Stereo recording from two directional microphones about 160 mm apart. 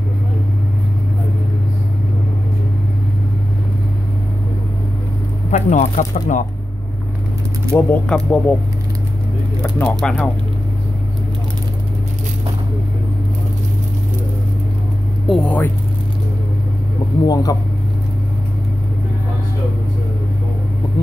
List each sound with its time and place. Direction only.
5.5 s speech: 50° left (ahead or behind)
7.7 s speech: 10° left (ahead or behind)
9.6 s speech: 5° left (ahead or behind)
15.2 s speech: 5° left (ahead or behind)
17.3 s speech: 25° left (ahead or behind)